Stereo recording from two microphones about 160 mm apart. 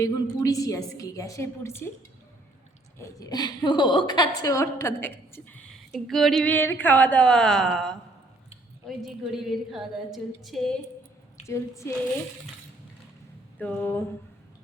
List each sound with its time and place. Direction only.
0.3 s a woman's voice: 20° left (ahead or behind)
3.0 s a woman's voice: 20° left (ahead or behind); by 7.9 s centre (ahead or behind)
9.0 s a woman's voice: centre (ahead or behind)
11.4 s a woman's voice: 20° left (ahead or behind)
13.6 s a woman's voice: 10° left (ahead or behind)